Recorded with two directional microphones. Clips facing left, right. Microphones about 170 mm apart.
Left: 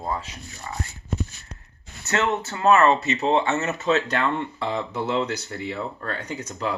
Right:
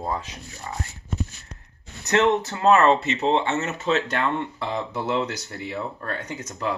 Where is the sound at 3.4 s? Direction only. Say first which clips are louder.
Left 1 dB; 25° right (ahead or behind).